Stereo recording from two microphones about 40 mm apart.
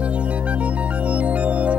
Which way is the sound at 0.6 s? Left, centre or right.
Right.